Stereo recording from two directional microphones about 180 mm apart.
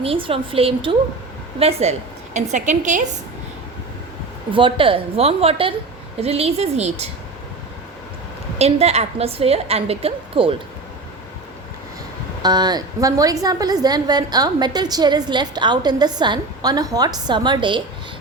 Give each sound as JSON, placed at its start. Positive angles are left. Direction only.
{"t": 0.0, "sound": "a woman's voice", "side_deg": -30}
{"t": 4.5, "sound": "a woman's voice", "side_deg": -30}
{"t": 8.5, "sound": "a woman's voice", "side_deg": -35}
{"t": 12.4, "sound": "a woman's voice", "side_deg": -25}